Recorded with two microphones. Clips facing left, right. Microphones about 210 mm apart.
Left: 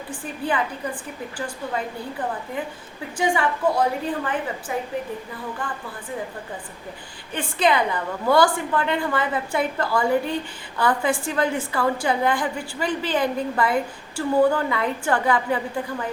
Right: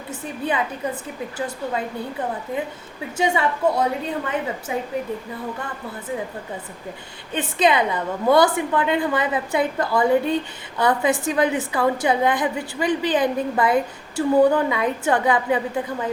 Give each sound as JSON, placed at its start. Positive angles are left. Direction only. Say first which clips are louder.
{"t": 0.1, "sound": "a woman's voice", "louder": "right 1 dB", "side_deg": -20}
{"t": 3.2, "sound": "a woman's voice", "louder": "right 1 dB", "side_deg": -25}
{"t": 7.3, "sound": "a woman's voice", "louder": "right 2 dB", "side_deg": -20}